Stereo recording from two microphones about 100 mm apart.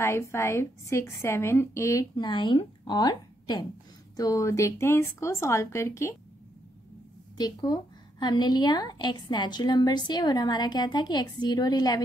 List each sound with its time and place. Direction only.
0.0 s a woman's voice: 25° left (ahead or behind)
2.1 s a woman's voice: 50° left (ahead or behind)
4.2 s a woman's voice: 35° left (ahead or behind)
7.3 s a woman's voice: 45° left (ahead or behind)